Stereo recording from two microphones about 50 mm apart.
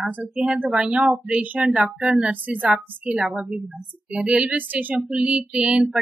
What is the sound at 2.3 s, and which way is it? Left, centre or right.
A woman's voice, right.